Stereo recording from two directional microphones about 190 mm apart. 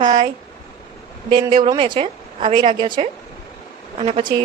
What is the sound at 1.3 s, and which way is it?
Speech, 25° right (ahead or behind).